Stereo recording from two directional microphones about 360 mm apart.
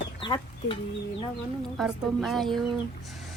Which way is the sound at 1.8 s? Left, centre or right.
Centre.